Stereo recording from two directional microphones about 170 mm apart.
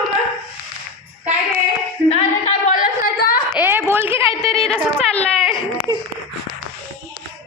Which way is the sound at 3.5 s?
10° right (ahead or behind).